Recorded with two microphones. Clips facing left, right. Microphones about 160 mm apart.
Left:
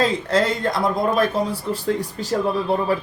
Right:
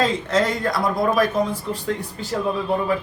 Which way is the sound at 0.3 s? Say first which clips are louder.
Left 1 dB; 30° left (ahead or behind).